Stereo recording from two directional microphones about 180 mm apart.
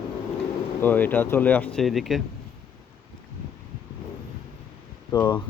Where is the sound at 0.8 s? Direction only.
10° left (ahead or behind).